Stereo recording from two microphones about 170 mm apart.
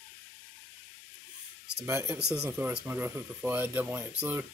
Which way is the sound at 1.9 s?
15° right (ahead or behind).